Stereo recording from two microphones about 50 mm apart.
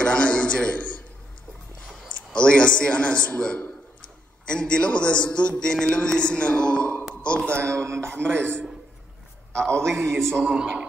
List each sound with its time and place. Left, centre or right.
0.0 s a man's voice: left
2.3 s a man's voice: centre
5.6 s a sound: centre
6.0 s a man's voice: centre
7.6 s a sound: right
8.2 s a man's voice: right
9.6 s a man's voice: left
9.8 s a man's voice: right
10.4 s speech: centre